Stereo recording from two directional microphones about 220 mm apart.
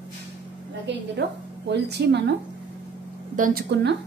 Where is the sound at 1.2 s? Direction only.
50° right (ahead or behind).